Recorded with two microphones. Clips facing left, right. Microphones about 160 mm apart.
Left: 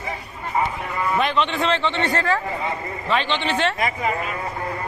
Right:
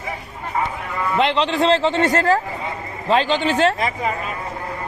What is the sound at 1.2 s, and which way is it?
A man's voice, 30° right (ahead or behind).